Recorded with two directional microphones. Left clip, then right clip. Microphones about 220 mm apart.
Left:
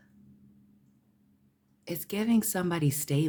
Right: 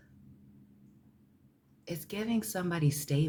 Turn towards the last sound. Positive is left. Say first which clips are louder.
# left 3 dB
turn(degrees=30)  # may be behind; listen again after turning